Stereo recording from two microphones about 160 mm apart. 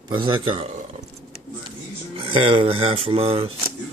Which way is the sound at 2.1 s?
30° right (ahead or behind).